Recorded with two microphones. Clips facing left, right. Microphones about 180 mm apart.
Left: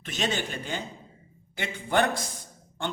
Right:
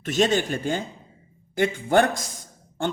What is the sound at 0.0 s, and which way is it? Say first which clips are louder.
Speech: right 9 dB; 45° right (ahead or behind).